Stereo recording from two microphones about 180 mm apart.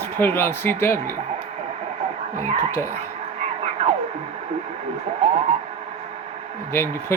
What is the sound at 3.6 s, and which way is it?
Music, 35° right (ahead or behind).